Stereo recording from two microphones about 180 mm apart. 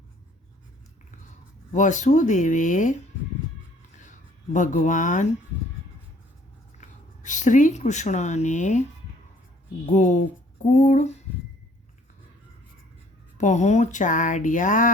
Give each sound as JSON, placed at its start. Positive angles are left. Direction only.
{"t": 1.7, "sound": "speech", "side_deg": 45}
{"t": 4.5, "sound": "speech", "side_deg": 45}
{"t": 6.7, "sound": "speech", "side_deg": 45}
{"t": 9.9, "sound": "speech", "side_deg": 45}
{"t": 13.4, "sound": "speech", "side_deg": 40}